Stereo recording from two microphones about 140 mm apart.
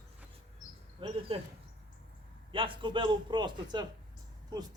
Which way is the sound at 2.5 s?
35° right (ahead or behind).